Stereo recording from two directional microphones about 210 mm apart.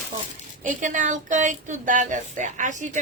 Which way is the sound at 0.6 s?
35° right (ahead or behind).